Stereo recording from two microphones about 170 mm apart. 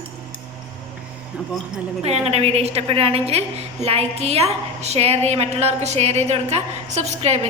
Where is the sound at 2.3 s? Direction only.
35° right (ahead or behind).